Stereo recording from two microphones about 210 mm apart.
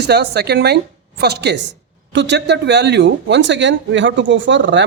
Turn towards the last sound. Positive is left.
turn(degrees=-60)  # may be behind; listen again after turning